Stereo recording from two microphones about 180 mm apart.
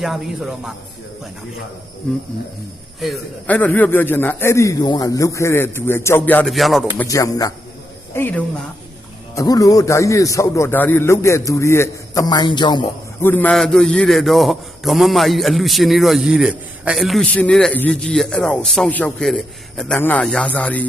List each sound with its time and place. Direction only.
0.0 s a man's voice: centre (ahead or behind)
3.0 s a man's voice: 5° left (ahead or behind)
6.9 s a man's voice: 15° left (ahead or behind)
13.2 s a man's voice: 10° left (ahead or behind)